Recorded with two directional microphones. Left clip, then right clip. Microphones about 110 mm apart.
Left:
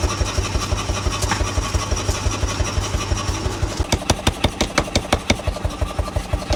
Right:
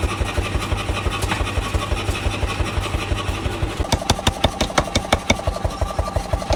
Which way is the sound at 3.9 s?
5° left (ahead or behind).